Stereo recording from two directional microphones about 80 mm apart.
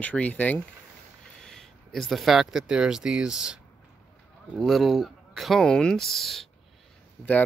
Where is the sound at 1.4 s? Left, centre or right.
Centre.